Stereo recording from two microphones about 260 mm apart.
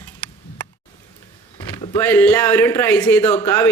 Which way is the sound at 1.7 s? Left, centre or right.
Centre.